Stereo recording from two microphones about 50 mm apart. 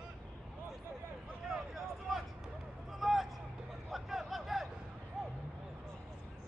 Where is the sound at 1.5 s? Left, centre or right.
Centre.